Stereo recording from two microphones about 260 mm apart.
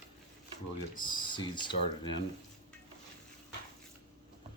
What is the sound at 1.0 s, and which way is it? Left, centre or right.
Speech, centre.